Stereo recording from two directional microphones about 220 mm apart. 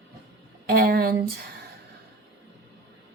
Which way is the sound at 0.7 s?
45° right (ahead or behind).